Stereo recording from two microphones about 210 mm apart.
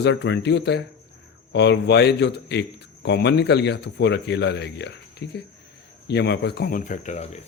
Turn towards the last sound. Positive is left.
turn(degrees=35)  # may be behind; listen again after turning